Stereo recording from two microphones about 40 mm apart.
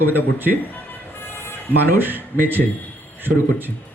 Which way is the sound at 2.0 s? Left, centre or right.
Right.